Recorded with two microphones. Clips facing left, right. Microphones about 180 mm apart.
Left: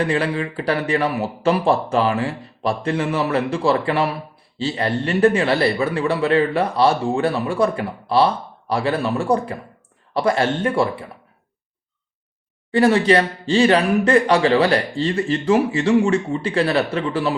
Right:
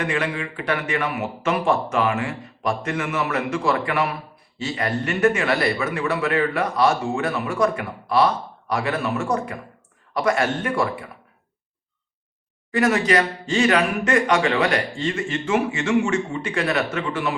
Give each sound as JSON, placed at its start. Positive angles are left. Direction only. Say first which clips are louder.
{"t": 0.0, "sound": "speech", "louder": "left 4 dB", "side_deg": 30}
{"t": 12.7, "sound": "speech", "louder": "left 4 dB", "side_deg": 30}